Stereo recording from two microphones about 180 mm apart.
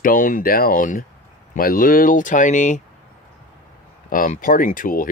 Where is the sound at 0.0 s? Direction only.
50° left (ahead or behind).